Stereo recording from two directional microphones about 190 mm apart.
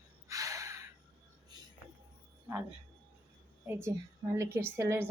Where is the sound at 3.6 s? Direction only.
10° right (ahead or behind).